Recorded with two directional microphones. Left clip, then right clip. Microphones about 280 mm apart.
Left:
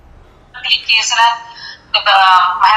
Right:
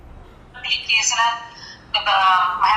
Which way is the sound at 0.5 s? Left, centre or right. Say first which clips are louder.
Left 7 dB; left.